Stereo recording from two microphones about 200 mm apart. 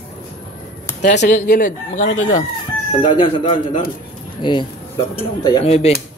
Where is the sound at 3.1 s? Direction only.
25° left (ahead or behind).